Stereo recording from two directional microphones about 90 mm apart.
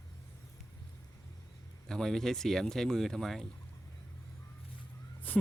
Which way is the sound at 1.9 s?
5° left (ahead or behind).